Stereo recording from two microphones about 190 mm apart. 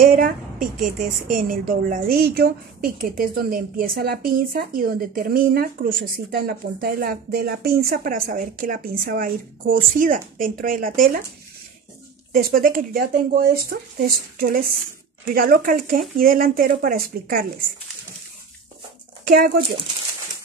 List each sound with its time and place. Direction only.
0.0 s a woman's voice: 50° right (ahead or behind)
12.3 s a woman's voice: 50° right (ahead or behind)
19.2 s speech: 50° right (ahead or behind)